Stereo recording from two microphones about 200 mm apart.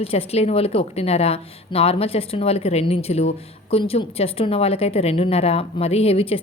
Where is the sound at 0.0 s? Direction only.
30° left (ahead or behind).